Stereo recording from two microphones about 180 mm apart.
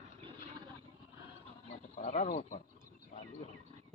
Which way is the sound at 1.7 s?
40° left (ahead or behind).